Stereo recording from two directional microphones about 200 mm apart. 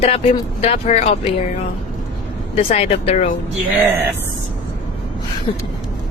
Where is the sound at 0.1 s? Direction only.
30° left (ahead or behind).